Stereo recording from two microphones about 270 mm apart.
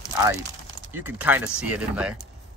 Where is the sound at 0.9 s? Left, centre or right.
Centre.